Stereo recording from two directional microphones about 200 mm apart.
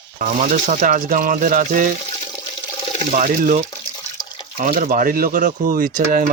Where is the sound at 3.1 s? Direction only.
40° right (ahead or behind).